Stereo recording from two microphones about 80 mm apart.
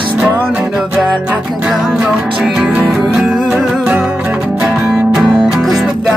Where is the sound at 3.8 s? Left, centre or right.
Centre.